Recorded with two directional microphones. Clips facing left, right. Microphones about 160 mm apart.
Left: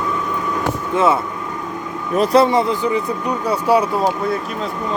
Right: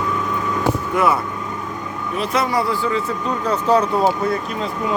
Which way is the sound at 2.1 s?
40° left (ahead or behind).